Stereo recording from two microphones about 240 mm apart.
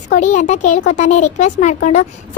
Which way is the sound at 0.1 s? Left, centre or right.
Left.